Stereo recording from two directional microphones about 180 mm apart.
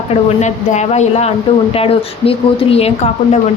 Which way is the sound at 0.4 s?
40° left (ahead or behind).